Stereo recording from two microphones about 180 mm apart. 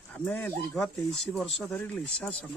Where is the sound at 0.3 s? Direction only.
10° left (ahead or behind).